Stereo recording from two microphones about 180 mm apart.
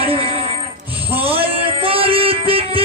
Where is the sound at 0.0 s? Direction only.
30° right (ahead or behind).